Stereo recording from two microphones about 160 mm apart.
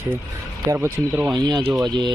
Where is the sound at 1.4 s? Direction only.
25° right (ahead or behind).